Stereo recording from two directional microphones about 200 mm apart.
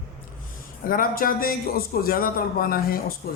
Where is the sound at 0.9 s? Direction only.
45° left (ahead or behind).